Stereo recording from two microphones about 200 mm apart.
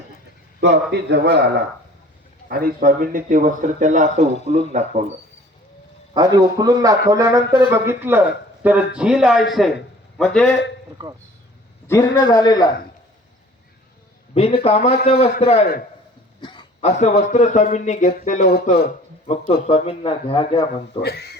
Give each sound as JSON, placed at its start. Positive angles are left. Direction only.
{"t": 0.9, "sound": "a man's voice", "side_deg": -60}
{"t": 2.5, "sound": "speech", "side_deg": -50}
{"t": 6.1, "sound": "speech", "side_deg": -20}
{"t": 11.9, "sound": "a man's voice", "side_deg": 10}
{"t": 14.3, "sound": "speech", "side_deg": 30}
{"t": 16.4, "sound": "throat clearing", "side_deg": 25}
{"t": 17.0, "sound": "speech", "side_deg": 35}
{"t": 21.0, "sound": "speech", "side_deg": 55}